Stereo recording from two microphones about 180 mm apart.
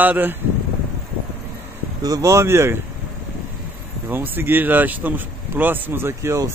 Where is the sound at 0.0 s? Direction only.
10° right (ahead or behind).